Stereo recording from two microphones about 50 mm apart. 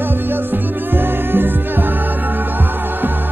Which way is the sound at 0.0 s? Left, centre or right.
Right.